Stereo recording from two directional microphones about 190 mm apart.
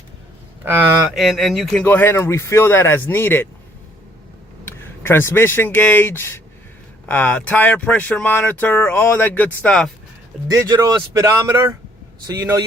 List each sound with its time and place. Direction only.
1.1 s speech: centre (ahead or behind)
4.6 s speech: 15° left (ahead or behind)
10.5 s speech: 20° right (ahead or behind)